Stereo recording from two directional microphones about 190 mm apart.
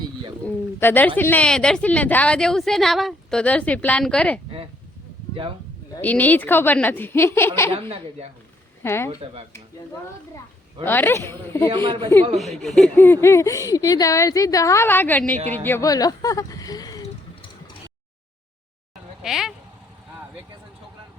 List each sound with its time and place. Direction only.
0.4 s speech: 10° left (ahead or behind)
6.0 s speech: 10° left (ahead or behind)
7.7 s a woman's voice: 30° right (ahead or behind)
8.8 s speech: 15° left (ahead or behind)
10.8 s speech: 10° left (ahead or behind)
11.7 s a woman's voice: 25° right (ahead or behind)
12.6 s speech: centre (ahead or behind); by 17.0 s 20° left (ahead or behind)
19.2 s speech: centre (ahead or behind)